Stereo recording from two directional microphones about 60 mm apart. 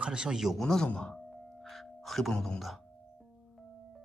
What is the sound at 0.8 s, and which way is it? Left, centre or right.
Music, centre.